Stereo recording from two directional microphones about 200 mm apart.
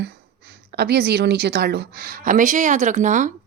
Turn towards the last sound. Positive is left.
turn(degrees=-40)  # may be behind; listen again after turning